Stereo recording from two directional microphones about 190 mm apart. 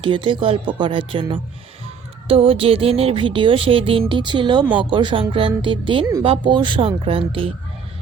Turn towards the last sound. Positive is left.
turn(degrees=-30)  # may be behind; listen again after turning